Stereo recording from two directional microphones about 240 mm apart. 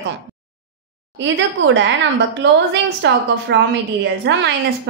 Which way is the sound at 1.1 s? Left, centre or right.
Right.